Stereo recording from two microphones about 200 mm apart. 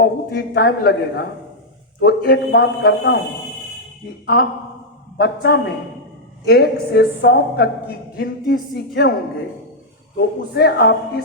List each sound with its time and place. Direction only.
0.0 s a woman's voice: 50° left (ahead or behind)
4.3 s a woman's voice: 50° left (ahead or behind)
10.2 s a woman's voice: 50° left (ahead or behind)